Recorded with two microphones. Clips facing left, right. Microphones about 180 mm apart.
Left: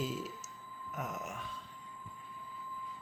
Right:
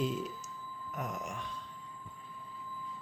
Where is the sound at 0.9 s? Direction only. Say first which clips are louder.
Right 1 dB; centre (ahead or behind).